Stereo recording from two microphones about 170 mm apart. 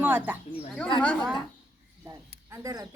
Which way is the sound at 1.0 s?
5° left (ahead or behind).